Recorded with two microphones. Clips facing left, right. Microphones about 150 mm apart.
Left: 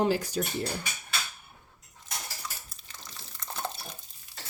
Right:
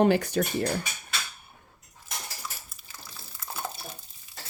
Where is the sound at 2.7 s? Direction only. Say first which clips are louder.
Right 1 dB; 5° right (ahead or behind).